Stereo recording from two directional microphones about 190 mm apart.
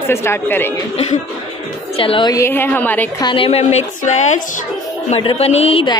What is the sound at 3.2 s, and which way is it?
A woman's voice, 25° left (ahead or behind).